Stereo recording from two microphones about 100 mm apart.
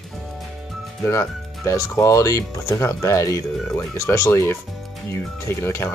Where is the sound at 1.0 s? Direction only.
30° left (ahead or behind).